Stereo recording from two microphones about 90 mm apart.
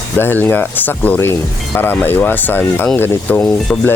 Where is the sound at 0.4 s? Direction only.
20° left (ahead or behind).